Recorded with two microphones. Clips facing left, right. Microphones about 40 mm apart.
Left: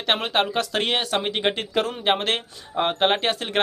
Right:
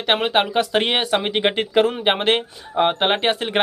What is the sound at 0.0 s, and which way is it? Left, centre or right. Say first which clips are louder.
Speech: right 4 dB; centre.